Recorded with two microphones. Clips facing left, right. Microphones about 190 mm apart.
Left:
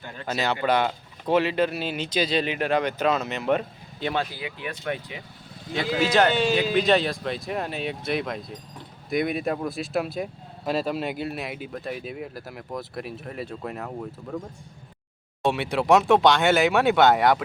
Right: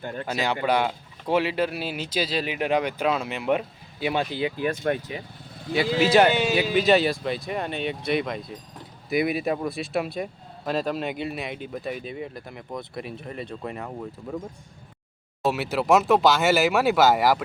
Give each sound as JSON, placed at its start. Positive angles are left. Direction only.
{"t": 0.0, "sound": "speech", "side_deg": -50}
{"t": 0.3, "sound": "speech", "side_deg": -10}
{"t": 4.4, "sound": "speech", "side_deg": -35}
{"t": 5.7, "sound": "speech", "side_deg": -5}
{"t": 15.4, "sound": "speech", "side_deg": -5}